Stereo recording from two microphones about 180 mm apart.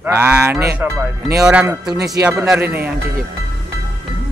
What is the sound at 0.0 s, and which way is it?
Speech, 10° right (ahead or behind).